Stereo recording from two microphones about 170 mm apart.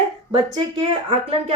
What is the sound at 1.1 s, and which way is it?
Speech, 35° right (ahead or behind).